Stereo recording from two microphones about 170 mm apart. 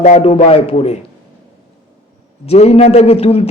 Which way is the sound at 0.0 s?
35° left (ahead or behind).